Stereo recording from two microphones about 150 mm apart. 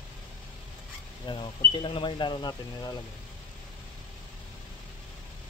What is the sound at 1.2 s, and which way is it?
Speech, 30° left (ahead or behind).